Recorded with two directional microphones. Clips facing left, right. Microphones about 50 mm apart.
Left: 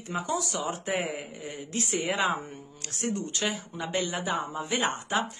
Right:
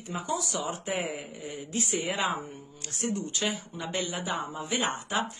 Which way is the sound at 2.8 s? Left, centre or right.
Left.